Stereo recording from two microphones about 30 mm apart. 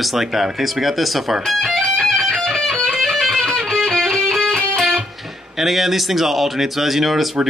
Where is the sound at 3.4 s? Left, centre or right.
Centre.